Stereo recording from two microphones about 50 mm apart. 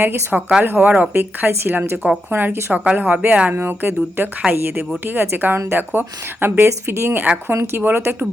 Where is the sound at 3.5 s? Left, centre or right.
Right.